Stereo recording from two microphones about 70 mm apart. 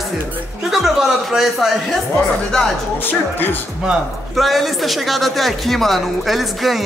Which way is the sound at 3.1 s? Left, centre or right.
Left.